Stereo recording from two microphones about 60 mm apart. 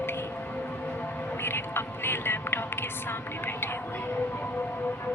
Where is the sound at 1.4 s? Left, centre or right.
Left.